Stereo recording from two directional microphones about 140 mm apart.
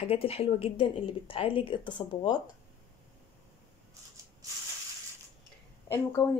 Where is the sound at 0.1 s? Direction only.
45° left (ahead or behind).